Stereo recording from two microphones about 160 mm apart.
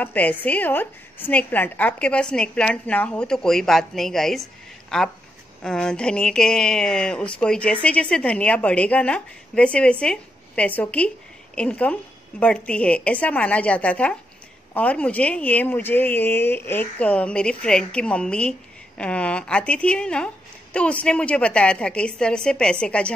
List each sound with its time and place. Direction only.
0.0 s speech: 10° left (ahead or behind)